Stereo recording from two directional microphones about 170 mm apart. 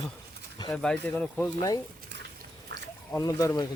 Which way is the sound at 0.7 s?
5° left (ahead or behind).